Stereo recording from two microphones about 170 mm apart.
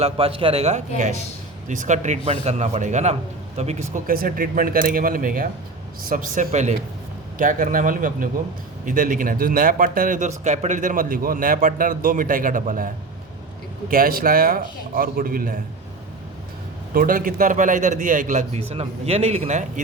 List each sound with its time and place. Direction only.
0.0 s a man's voice: 35° right (ahead or behind)
4.0 s a man's voice: 55° right (ahead or behind)
16.9 s a man's voice: 55° right (ahead or behind)